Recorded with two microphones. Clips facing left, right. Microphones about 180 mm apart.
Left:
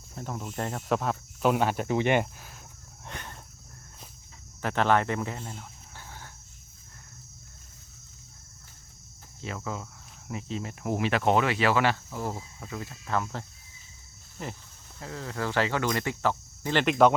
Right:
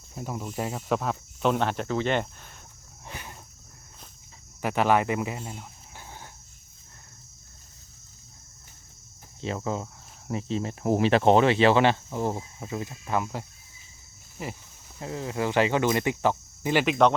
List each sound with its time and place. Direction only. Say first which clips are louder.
0.1 s speech: right 2 dB; 5° right (ahead or behind)
3.1 s wild animals: even; 5° right (ahead or behind)
4.6 s speech: right 2 dB; 10° right (ahead or behind)
9.4 s speech: right 6 dB; 30° right (ahead or behind); by 14.5 s 5° right (ahead or behind)
14.9 s speech: right 5 dB; 20° right (ahead or behind)
16.8 s speech: left 2 dB; centre (ahead or behind)